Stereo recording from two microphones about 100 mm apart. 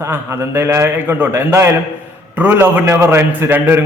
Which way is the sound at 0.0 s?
25° right (ahead or behind).